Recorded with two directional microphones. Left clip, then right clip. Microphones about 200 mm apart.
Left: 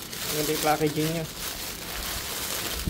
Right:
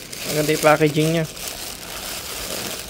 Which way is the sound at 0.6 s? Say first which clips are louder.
Right 10 dB; 60° right (ahead or behind).